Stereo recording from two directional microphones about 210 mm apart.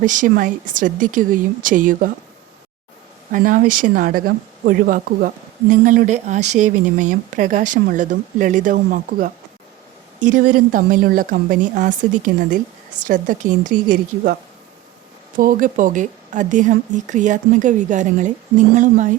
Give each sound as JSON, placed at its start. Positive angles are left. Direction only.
{"t": 0.0, "sound": "a woman's voice", "side_deg": -40}
{"t": 3.3, "sound": "a woman's voice", "side_deg": -40}
{"t": 15.4, "sound": "a woman's voice", "side_deg": -40}